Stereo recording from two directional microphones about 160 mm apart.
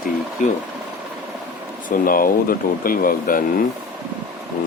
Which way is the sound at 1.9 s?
60° left (ahead or behind).